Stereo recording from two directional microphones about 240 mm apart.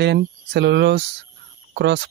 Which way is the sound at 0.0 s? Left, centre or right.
Right.